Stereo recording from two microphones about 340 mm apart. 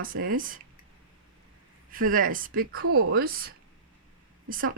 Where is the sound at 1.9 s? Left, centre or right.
Right.